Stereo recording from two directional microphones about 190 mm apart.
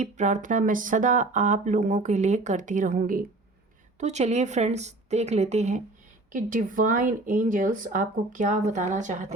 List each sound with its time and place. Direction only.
0.0 s speech: 40° right (ahead or behind)
4.0 s speech: 35° right (ahead or behind)